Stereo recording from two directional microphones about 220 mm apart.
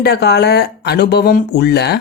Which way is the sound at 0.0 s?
50° left (ahead or behind).